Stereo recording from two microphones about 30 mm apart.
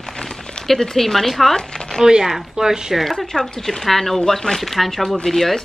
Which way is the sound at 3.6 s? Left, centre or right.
Centre.